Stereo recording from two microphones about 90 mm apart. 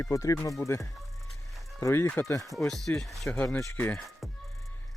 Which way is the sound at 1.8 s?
30° left (ahead or behind).